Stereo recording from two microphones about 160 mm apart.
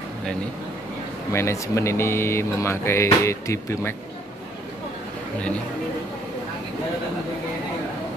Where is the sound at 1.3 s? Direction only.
15° left (ahead or behind).